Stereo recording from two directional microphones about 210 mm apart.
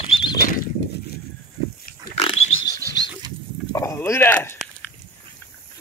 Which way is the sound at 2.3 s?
70° left (ahead or behind).